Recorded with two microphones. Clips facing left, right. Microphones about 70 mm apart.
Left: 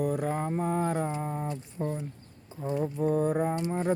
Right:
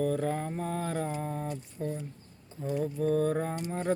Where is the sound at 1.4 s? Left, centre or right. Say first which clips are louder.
Left 2 dB; left.